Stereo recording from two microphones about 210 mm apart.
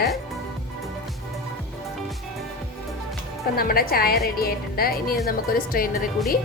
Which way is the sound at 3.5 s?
45° left (ahead or behind).